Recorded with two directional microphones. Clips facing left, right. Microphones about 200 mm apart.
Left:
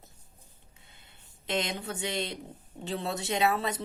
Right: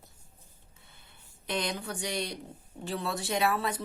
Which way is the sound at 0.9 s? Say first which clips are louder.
Right 1 dB; 20° left (ahead or behind).